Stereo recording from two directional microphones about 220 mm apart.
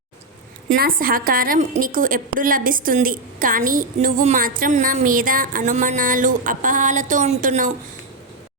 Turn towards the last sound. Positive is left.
turn(degrees=-35)  # may be behind; listen again after turning